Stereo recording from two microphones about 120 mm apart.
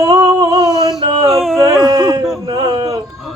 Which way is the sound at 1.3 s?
Centre (ahead or behind).